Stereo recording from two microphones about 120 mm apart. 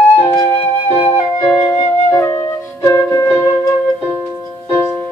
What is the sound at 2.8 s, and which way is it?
Music, 25° left (ahead or behind).